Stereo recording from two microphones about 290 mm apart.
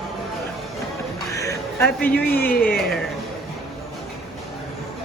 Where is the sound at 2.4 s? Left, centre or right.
Left.